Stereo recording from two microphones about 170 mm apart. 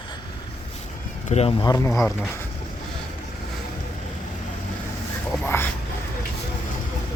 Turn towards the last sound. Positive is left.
turn(degrees=15)  # may be behind; listen again after turning